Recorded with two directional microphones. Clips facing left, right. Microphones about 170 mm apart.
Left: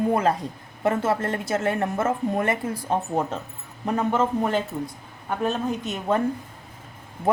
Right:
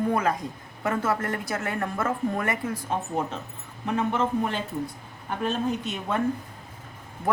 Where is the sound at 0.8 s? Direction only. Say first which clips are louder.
Left 3 dB; 25° left (ahead or behind).